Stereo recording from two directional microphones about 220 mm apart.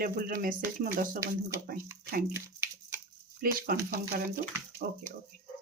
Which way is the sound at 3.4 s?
40° right (ahead or behind).